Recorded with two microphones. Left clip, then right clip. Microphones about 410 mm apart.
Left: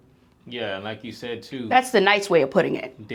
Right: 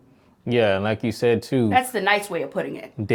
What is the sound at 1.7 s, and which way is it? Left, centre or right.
A woman's voice, left.